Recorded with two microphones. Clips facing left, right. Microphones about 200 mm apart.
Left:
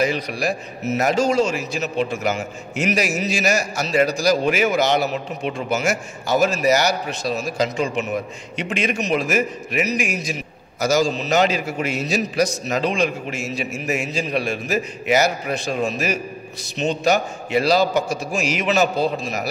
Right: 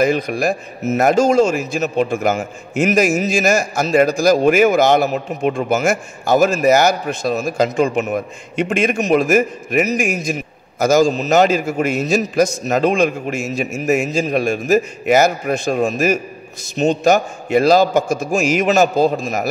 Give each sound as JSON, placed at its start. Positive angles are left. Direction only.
{"t": 0.0, "sound": "a man's voice", "side_deg": -50}